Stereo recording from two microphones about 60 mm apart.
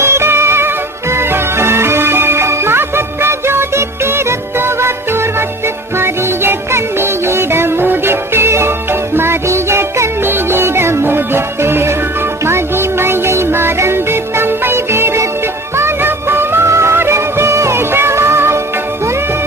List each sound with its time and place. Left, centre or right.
0.0 s music: right